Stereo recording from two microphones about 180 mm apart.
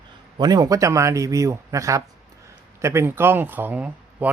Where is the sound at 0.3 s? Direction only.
20° right (ahead or behind).